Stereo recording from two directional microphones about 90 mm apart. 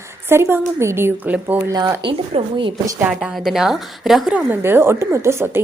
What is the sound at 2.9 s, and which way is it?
A woman's voice, 15° right (ahead or behind).